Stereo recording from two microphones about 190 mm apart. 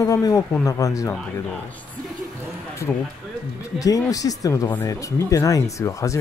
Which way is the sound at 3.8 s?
20° left (ahead or behind).